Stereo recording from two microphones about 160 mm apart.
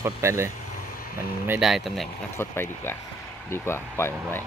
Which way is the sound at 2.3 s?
15° left (ahead or behind).